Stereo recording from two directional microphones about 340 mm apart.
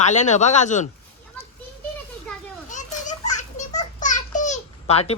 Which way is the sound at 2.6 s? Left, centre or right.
Left.